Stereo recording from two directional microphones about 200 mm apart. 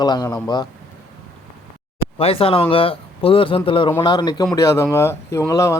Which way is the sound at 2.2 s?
30° left (ahead or behind).